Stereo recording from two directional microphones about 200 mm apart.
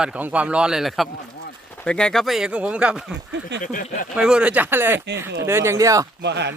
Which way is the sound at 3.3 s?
60° right (ahead or behind).